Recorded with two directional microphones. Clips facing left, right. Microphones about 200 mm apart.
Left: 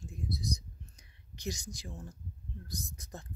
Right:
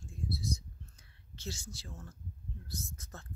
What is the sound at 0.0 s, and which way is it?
Whispering, 20° left (ahead or behind).